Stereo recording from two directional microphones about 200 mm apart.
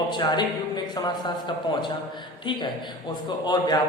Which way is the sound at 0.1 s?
20° left (ahead or behind).